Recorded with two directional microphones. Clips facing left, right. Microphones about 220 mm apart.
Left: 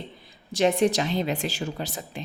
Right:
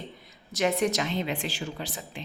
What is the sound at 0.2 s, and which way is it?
Speech, 30° left (ahead or behind).